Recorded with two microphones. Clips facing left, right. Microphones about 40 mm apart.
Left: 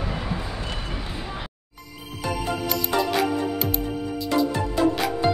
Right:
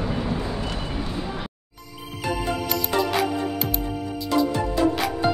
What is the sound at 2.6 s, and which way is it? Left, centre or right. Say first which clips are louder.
Music: left 1 dB; centre.